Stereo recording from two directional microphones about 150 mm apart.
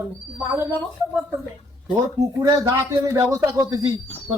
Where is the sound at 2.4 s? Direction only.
20° right (ahead or behind).